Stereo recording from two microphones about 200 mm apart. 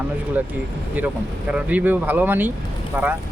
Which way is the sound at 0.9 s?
5° right (ahead or behind).